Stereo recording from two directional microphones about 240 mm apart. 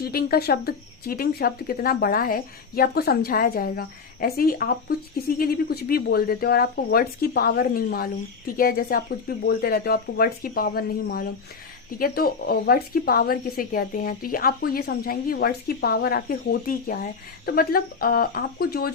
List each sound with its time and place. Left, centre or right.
0.0 s speech: left